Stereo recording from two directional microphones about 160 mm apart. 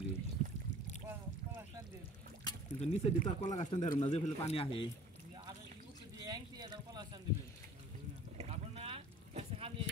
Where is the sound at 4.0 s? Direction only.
35° left (ahead or behind).